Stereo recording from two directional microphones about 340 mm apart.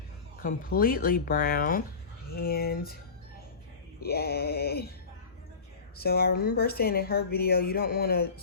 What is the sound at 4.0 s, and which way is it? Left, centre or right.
Speech, left.